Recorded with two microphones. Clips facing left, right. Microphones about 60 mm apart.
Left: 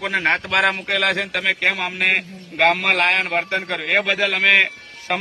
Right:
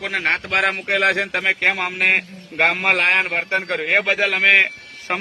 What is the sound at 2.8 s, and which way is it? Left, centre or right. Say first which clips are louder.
A man's voice: right 1 dB; right.